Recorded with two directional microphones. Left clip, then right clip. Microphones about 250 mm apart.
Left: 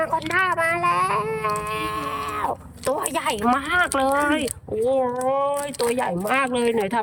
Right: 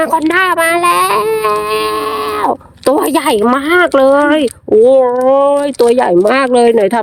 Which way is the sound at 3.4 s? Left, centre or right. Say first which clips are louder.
Right 10 dB; right.